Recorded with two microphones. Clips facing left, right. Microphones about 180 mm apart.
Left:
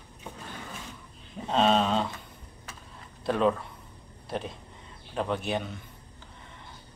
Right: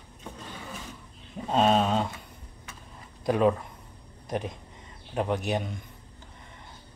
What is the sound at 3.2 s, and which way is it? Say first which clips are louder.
Speech: right 2 dB; 10° right (ahead or behind).